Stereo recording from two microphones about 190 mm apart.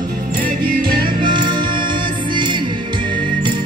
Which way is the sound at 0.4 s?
50° right (ahead or behind).